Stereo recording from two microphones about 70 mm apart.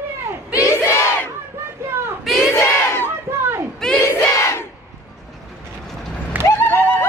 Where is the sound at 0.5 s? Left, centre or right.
Left.